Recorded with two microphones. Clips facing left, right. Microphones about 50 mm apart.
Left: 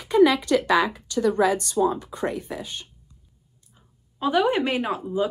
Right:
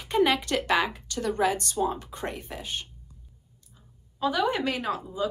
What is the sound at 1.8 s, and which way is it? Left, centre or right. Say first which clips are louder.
Speech: left 6 dB; left.